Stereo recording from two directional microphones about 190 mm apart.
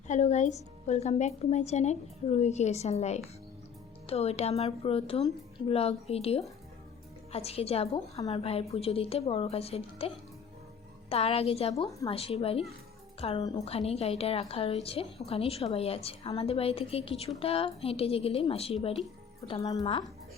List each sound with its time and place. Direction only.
0.1 s a woman's voice: 40° left (ahead or behind)
11.1 s a woman's voice: 30° left (ahead or behind)